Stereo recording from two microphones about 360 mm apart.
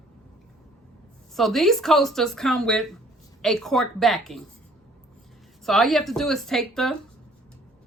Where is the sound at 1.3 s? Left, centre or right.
Centre.